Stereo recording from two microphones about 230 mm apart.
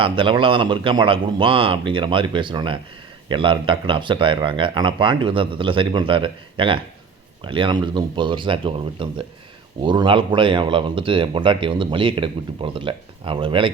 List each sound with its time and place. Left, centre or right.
0.0 s speech: right